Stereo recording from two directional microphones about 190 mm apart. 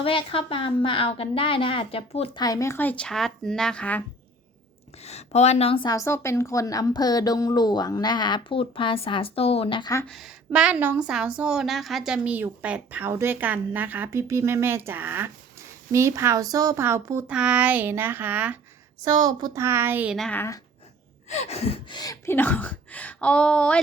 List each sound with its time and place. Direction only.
0.0 s a woman's voice: 30° left (ahead or behind); by 4.0 s 5° left (ahead or behind)
5.0 s a woman's voice: 35° left (ahead or behind)
10.1 s a woman's voice: centre (ahead or behind)
19.0 s a woman's voice: 20° right (ahead or behind); by 20.6 s 10° left (ahead or behind)
21.2 s gasp: 35° left (ahead or behind); by 23.8 s 5° left (ahead or behind)